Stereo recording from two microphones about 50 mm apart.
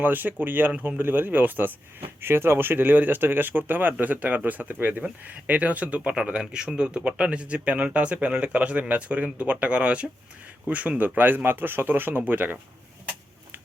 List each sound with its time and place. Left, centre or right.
0.0 s speech: right